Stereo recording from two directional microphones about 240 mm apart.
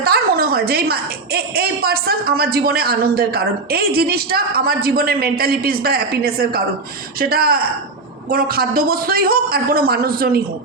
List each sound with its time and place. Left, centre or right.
0.0 s a woman's voice: right